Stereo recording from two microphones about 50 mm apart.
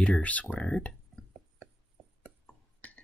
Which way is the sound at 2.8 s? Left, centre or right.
Left.